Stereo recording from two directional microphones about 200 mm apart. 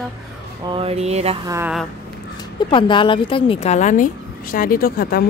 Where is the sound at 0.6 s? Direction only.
25° right (ahead or behind).